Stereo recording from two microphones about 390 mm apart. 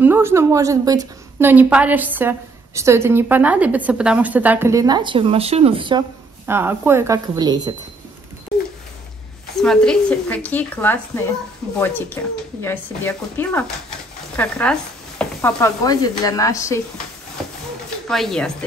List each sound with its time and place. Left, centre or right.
0.0 s a woman's voice: centre
9.6 s a woman's voice: centre
18.0 s a woman's voice: centre